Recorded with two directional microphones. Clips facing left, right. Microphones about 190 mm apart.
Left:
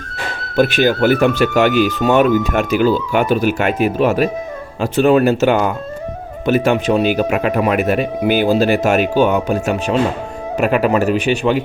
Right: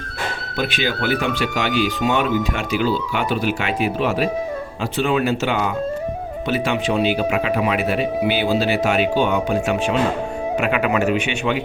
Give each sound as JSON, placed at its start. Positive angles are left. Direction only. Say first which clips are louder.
{"t": 0.5, "sound": "a man's voice", "louder": "left 10 dB", "side_deg": 45}